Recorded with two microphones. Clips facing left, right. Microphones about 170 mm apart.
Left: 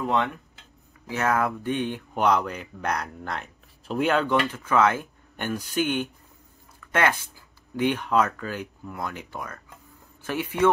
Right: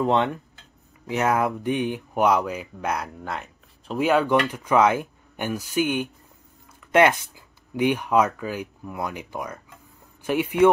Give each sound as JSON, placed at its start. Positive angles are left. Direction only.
{"t": 0.0, "sound": "speech", "side_deg": -30}
{"t": 1.0, "sound": "speech", "side_deg": -15}